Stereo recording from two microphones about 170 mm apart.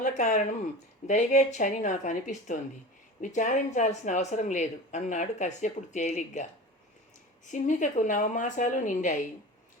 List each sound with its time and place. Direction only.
0.0 s speech: 45° left (ahead or behind)